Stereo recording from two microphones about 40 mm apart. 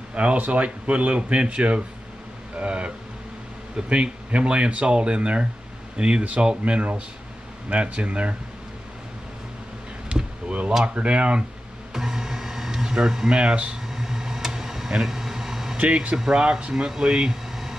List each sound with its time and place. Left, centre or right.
0.1 s speech: right
10.1 s basketball bounce: right
11.0 s speech: right
11.9 s music: centre
13.3 s speech: right
13.8 s a sound: centre
15.9 s speech: right
16.3 s speech: right